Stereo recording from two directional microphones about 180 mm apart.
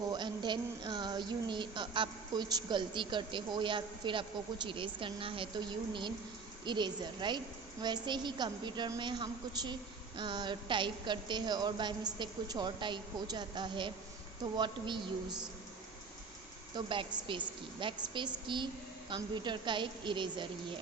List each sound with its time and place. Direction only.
0.1 s a woman's voice: 25° right (ahead or behind)
16.7 s a woman's voice: 25° right (ahead or behind)